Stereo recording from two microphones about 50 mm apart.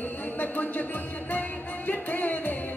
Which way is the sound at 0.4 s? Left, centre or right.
Left.